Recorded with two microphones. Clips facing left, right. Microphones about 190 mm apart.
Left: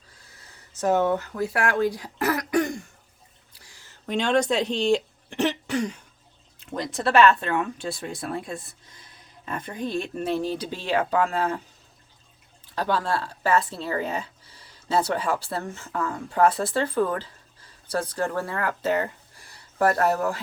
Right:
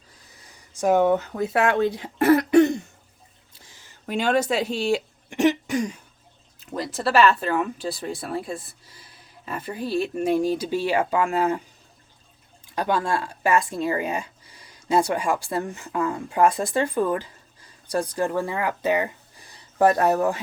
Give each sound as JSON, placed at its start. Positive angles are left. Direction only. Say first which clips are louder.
{"t": 0.3, "sound": "a sound", "louder": "right 1 dB", "side_deg": -15}
{"t": 4.0, "sound": "speech", "louder": "even", "side_deg": -5}
{"t": 12.6, "sound": "speech", "louder": "right 2 dB", "side_deg": -15}